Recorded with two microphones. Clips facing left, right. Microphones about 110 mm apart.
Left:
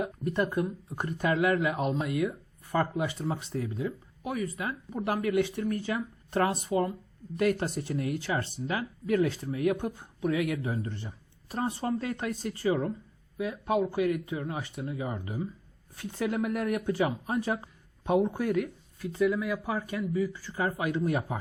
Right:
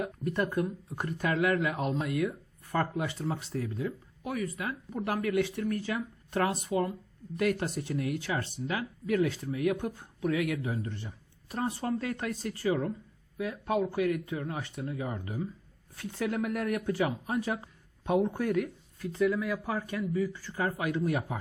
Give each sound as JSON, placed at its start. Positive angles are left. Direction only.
{"t": 0.0, "sound": "speech", "side_deg": 20}
{"t": 13.4, "sound": "speech", "side_deg": 20}
{"t": 18.0, "sound": "speech", "side_deg": 20}
{"t": 18.4, "sound": "speech", "side_deg": 5}